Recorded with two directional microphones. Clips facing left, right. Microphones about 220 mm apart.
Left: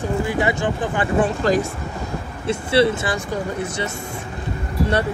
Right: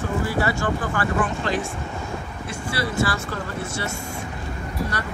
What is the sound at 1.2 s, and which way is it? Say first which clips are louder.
Speech: left 6 dB; 40° left (ahead or behind).